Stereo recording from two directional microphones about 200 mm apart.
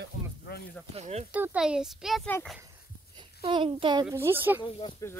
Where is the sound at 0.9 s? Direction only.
35° right (ahead or behind).